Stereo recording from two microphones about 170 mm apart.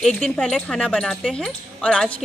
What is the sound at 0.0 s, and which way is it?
Speech, 5° left (ahead or behind).